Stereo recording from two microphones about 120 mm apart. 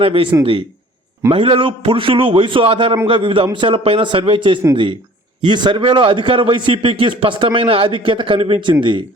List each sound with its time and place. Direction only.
0.0 s a man's voice: 50° right (ahead or behind)
1.3 s a man's voice: 45° right (ahead or behind)